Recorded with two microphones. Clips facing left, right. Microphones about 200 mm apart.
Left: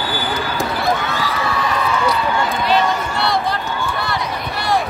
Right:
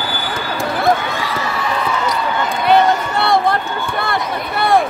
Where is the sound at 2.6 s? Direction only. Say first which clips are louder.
Right 7 dB; 55° right (ahead or behind).